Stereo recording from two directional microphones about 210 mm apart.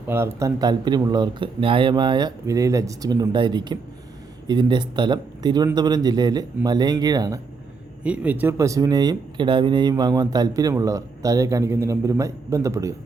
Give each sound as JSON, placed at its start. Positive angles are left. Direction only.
{"t": 0.1, "sound": "speech", "side_deg": -15}
{"t": 8.0, "sound": "speech", "side_deg": -5}